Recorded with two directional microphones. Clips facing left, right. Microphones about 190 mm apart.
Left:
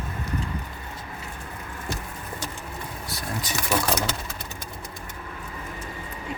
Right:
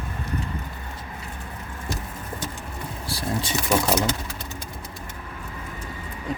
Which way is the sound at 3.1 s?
30° right (ahead or behind).